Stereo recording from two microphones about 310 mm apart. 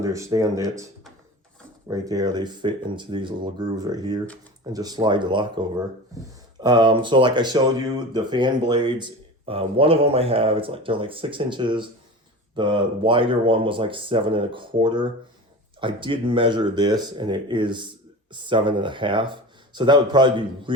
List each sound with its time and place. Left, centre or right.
0.0 s speech: centre
1.9 s speech: centre